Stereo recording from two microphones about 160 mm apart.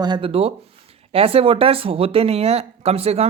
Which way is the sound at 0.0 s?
30° right (ahead or behind).